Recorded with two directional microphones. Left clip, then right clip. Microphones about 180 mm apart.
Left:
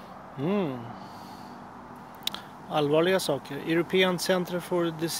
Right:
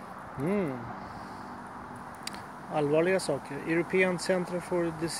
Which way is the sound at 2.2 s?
20° left (ahead or behind).